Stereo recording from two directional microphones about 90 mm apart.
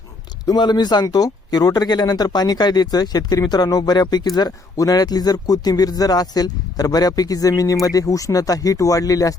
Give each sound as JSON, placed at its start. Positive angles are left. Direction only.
{"t": 0.4, "sound": "speech", "side_deg": 50}